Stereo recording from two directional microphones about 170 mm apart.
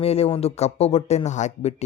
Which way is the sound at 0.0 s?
35° left (ahead or behind).